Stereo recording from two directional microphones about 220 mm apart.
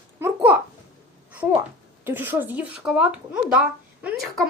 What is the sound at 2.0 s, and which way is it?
Speech, 10° right (ahead or behind).